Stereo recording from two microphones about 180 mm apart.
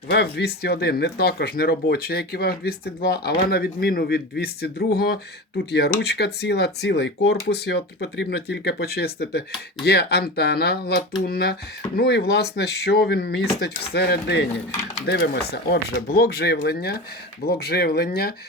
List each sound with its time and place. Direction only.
0.1 s speech: 70° left (ahead or behind)